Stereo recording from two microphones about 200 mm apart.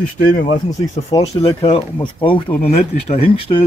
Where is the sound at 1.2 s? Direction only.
30° left (ahead or behind).